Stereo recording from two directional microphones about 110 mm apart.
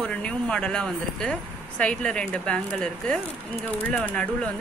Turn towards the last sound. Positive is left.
turn(degrees=10)  # may be behind; listen again after turning